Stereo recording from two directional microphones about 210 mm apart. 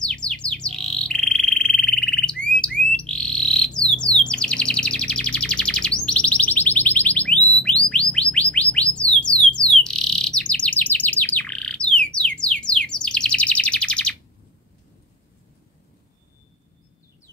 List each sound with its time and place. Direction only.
0.0 s bird: 5° left (ahead or behind)
8.1 s chirp tone: 5° left (ahead or behind)
8.9 s music: 5° left (ahead or behind)
9.8 s chirp: 5° left (ahead or behind)